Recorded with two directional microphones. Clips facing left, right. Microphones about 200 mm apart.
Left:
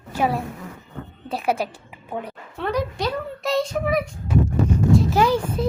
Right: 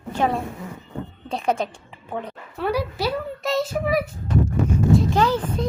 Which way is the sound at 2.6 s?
5° right (ahead or behind).